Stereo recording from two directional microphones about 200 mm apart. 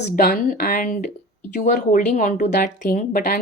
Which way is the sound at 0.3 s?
45° left (ahead or behind).